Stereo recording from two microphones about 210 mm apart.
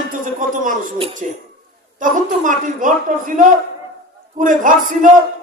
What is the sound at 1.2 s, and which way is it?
Speech, 35° right (ahead or behind).